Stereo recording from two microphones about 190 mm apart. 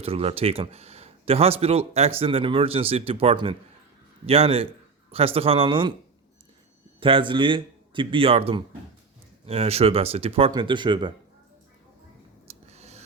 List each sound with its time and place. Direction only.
0.0 s a man's voice: 30° right (ahead or behind)
7.0 s a man's voice: 25° right (ahead or behind)
12.5 s a sound: 35° right (ahead or behind)